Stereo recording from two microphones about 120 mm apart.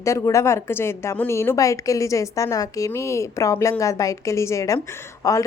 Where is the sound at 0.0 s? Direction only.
25° left (ahead or behind).